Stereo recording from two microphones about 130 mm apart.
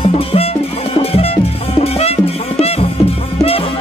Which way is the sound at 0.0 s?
50° left (ahead or behind).